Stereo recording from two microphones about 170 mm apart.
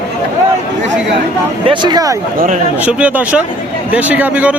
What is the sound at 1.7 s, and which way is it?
Speech, 25° right (ahead or behind).